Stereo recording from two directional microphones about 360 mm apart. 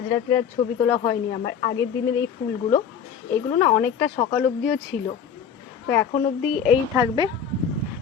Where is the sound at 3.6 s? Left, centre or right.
Centre.